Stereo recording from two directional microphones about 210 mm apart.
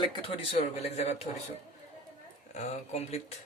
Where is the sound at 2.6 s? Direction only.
30° left (ahead or behind).